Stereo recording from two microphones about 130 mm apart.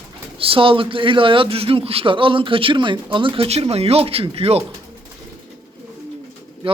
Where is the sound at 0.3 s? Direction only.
45° right (ahead or behind).